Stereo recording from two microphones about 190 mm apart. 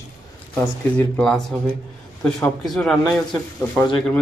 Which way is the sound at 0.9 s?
5° left (ahead or behind).